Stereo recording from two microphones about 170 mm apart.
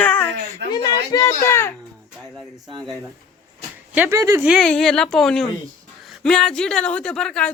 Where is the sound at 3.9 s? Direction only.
15° right (ahead or behind).